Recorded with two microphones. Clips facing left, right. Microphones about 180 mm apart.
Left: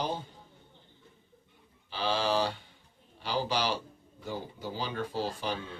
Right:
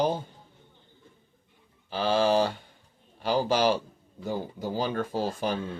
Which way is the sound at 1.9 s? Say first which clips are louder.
Right 6 dB; 45° right (ahead or behind).